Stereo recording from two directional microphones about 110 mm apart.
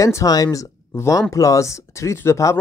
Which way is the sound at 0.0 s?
30° left (ahead or behind).